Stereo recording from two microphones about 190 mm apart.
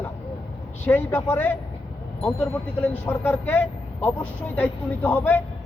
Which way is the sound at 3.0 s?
10° left (ahead or behind).